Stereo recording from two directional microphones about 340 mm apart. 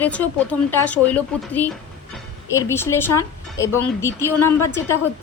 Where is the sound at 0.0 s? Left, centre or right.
Centre.